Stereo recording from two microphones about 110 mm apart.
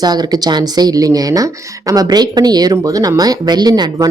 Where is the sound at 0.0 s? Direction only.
40° right (ahead or behind).